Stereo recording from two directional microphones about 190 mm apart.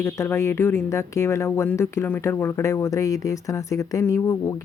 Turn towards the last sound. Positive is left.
turn(degrees=15)  # may be behind; listen again after turning